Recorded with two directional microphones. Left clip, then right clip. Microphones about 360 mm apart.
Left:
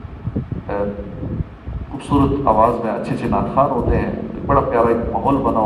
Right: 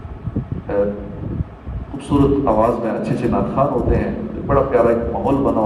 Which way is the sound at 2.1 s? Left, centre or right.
Centre.